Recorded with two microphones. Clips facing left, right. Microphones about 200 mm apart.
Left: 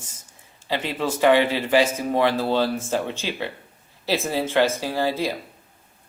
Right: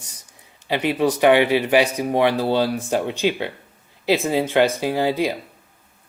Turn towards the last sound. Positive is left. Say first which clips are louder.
# right 3 dB
turn(degrees=-15)  # may be behind; listen again after turning